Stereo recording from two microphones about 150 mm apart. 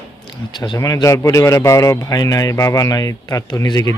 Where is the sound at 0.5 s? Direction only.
30° left (ahead or behind).